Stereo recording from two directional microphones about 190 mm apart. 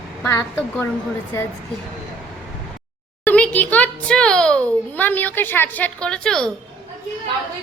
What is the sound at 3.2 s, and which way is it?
A child's voice, 10° left (ahead or behind).